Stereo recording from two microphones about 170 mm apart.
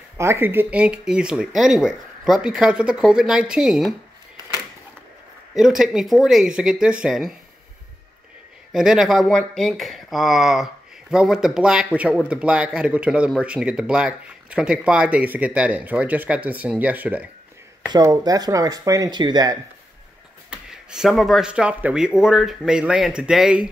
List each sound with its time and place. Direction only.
0.2 s speech: 15° right (ahead or behind)
5.5 s speech: centre (ahead or behind)
8.7 s speech: centre (ahead or behind)
17.9 s speech: 25° right (ahead or behind)
20.4 s speech: 5° right (ahead or behind)